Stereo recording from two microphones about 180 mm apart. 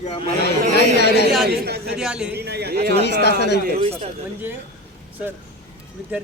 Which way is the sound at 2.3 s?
65° right (ahead or behind).